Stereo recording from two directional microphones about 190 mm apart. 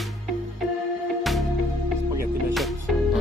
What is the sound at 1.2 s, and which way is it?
Music, centre (ahead or behind).